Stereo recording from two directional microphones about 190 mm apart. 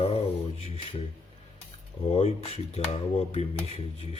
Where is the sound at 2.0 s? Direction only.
35° left (ahead or behind).